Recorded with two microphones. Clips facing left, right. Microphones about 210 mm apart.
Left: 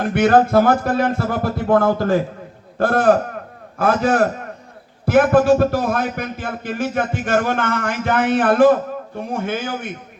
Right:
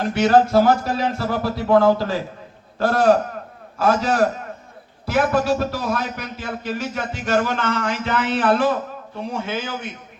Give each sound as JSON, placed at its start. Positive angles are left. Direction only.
{"t": 0.0, "sound": "a man's voice", "side_deg": 55}